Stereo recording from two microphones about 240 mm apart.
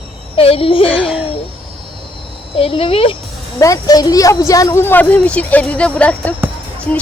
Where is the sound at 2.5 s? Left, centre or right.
Left.